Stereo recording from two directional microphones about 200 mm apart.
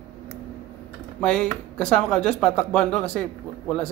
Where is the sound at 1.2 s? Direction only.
5° left (ahead or behind).